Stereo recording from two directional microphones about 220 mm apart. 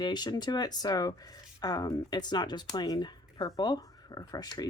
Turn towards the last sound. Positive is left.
turn(degrees=15)  # may be behind; listen again after turning